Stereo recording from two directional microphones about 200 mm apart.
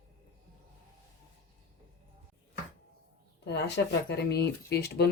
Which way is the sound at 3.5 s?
60° left (ahead or behind).